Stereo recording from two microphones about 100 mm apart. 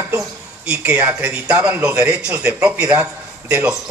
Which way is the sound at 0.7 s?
15° right (ahead or behind).